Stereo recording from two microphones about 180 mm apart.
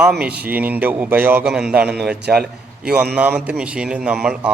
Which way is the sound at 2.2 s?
60° right (ahead or behind).